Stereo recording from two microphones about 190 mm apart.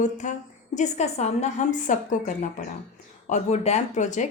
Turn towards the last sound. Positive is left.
turn(degrees=40)  # may be behind; listen again after turning